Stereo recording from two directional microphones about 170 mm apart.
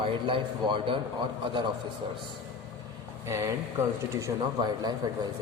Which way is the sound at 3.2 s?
15° right (ahead or behind).